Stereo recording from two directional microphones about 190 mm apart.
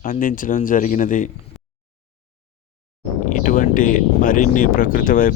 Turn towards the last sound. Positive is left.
turn(degrees=45)  # may be behind; listen again after turning